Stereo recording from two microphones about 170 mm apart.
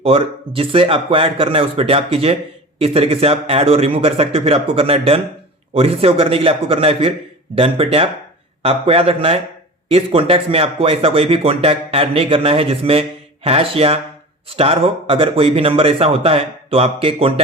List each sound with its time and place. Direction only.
0.0 s speech: 35° right (ahead or behind)